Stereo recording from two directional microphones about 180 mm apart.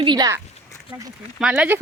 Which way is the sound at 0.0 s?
25° right (ahead or behind).